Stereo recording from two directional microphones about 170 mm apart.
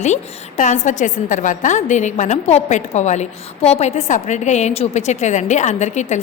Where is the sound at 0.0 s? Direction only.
45° left (ahead or behind).